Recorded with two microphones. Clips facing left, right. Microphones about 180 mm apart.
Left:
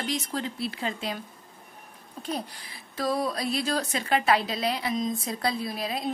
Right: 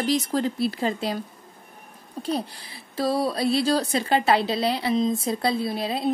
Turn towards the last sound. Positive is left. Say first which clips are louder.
# right 6 dB
turn(degrees=-30)  # may be behind; listen again after turning